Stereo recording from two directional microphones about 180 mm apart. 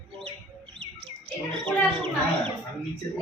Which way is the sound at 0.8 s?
80° right.